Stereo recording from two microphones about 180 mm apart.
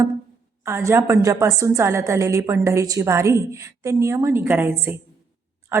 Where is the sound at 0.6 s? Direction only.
15° right (ahead or behind).